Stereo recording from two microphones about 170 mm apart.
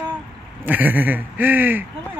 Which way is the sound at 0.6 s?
10° right (ahead or behind).